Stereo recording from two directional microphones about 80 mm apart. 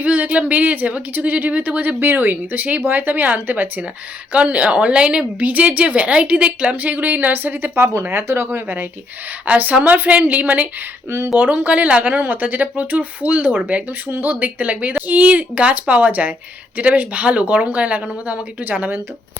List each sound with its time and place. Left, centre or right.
0.0 s speech: centre
2.0 s a woman's voice: right